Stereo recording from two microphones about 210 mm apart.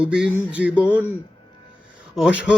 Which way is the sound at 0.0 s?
5° right (ahead or behind).